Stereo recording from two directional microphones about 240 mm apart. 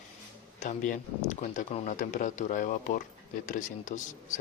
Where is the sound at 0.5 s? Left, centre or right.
Left.